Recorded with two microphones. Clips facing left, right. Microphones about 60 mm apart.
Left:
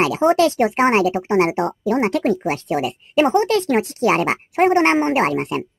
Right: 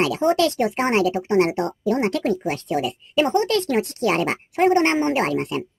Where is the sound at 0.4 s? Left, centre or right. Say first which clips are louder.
Left 4 dB; left.